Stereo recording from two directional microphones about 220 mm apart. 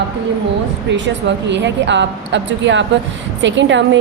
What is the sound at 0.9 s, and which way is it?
A woman's voice, 55° right (ahead or behind).